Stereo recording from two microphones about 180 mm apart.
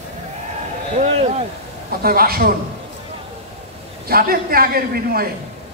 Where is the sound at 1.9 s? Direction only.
55° right (ahead or behind).